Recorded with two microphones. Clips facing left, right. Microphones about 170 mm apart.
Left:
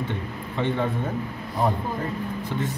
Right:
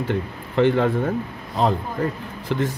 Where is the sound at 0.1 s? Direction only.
90° right.